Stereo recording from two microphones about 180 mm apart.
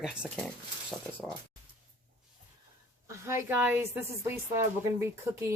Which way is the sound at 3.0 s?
15° right (ahead or behind).